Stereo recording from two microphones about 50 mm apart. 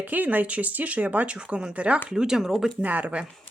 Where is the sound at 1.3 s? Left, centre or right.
Right.